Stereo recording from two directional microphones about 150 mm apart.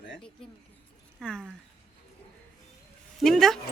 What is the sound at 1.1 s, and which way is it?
Speech, 5° left (ahead or behind).